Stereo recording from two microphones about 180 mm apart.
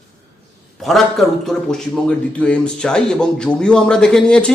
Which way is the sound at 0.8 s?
Centre (ahead or behind).